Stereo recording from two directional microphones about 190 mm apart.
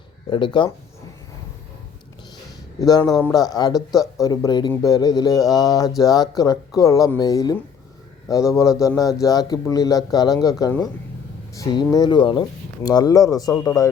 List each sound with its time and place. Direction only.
0.3 s speech: 25° left (ahead or behind)
2.8 s speech: 20° left (ahead or behind)